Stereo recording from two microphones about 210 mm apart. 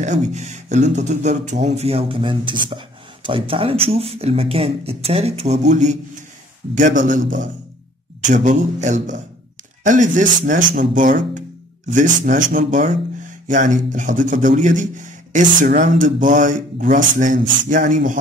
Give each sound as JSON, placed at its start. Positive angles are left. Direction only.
{"t": 0.0, "sound": "speech", "side_deg": -35}